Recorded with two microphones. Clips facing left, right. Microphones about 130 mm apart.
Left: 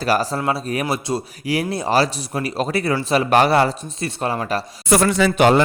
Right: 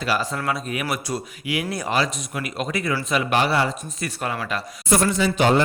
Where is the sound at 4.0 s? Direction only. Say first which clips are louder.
Left 5 dB; 30° left (ahead or behind).